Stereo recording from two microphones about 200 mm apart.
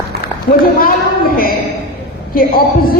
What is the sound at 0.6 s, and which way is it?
Speech, 45° left (ahead or behind).